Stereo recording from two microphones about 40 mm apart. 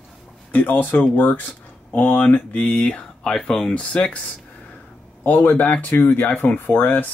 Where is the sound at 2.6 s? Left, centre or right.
Left.